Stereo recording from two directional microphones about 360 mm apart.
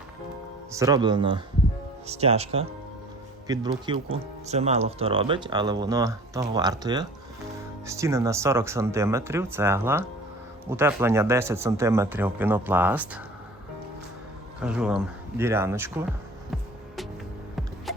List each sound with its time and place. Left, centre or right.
0.7 s speech: centre
14.6 s speech: centre
17.9 s a sound: centre